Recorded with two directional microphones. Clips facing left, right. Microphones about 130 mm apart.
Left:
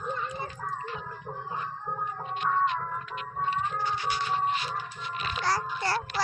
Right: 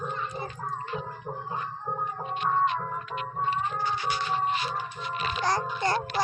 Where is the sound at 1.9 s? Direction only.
15° right (ahead or behind).